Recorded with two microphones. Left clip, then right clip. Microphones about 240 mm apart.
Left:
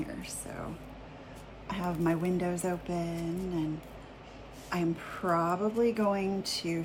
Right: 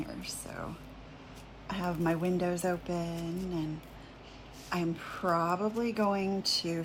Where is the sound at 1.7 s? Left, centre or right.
Centre.